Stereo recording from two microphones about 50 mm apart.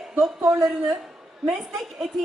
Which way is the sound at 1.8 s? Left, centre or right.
Centre.